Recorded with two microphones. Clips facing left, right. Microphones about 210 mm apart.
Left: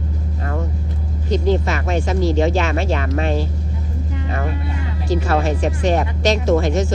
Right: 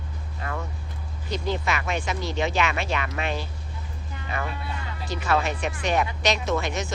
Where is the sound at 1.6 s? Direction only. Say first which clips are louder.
Left 6 dB; 40° left (ahead or behind).